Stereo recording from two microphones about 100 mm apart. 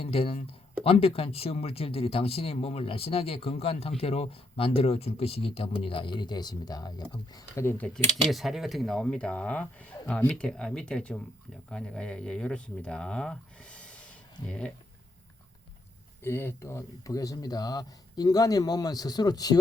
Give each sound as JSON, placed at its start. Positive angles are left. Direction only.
{"t": 0.0, "sound": "speech", "side_deg": 75}
{"t": 7.3, "sound": "speech", "side_deg": 25}
{"t": 8.3, "sound": "speech", "side_deg": 0}
{"t": 16.2, "sound": "speech", "side_deg": 25}